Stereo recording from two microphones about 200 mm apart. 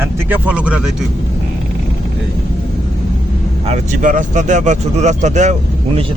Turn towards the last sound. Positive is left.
turn(degrees=-35)  # may be behind; listen again after turning